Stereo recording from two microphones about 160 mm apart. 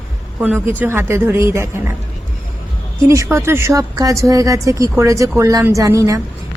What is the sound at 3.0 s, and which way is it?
Speech, 15° right (ahead or behind).